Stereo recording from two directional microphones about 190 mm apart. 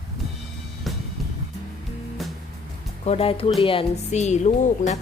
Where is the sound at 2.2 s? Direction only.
Centre (ahead or behind).